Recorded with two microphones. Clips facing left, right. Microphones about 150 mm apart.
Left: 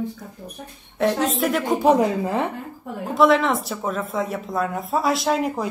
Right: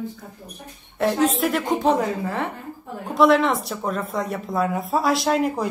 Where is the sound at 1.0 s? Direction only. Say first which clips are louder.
Right 1 dB; centre (ahead or behind).